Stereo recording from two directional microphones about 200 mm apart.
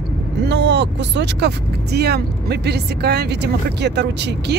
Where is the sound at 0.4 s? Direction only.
60° right (ahead or behind).